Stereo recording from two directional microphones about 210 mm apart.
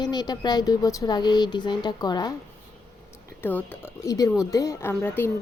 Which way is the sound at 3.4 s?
10° left (ahead or behind).